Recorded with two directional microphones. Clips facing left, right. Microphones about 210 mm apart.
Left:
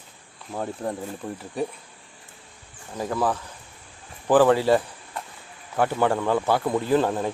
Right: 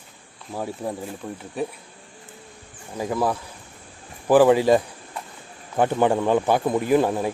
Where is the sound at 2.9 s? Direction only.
10° right (ahead or behind).